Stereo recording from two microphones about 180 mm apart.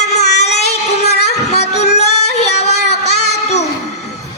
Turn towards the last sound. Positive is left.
turn(degrees=40)  # may be behind; listen again after turning